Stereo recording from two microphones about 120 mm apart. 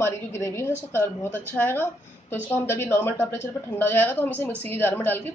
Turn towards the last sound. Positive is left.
turn(degrees=15)  # may be behind; listen again after turning